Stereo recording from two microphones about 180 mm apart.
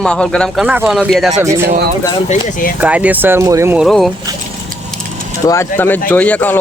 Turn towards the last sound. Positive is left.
turn(degrees=10)  # may be behind; listen again after turning